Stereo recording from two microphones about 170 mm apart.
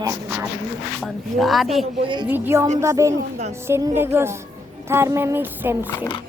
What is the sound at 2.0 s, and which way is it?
Speech, 30° right (ahead or behind).